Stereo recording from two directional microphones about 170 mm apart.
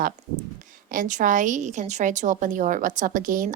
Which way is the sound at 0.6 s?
50° right (ahead or behind).